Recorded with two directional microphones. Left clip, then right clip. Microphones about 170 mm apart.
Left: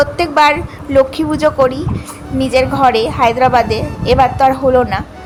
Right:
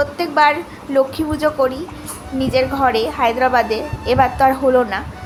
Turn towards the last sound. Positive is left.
turn(degrees=25)  # may be behind; listen again after turning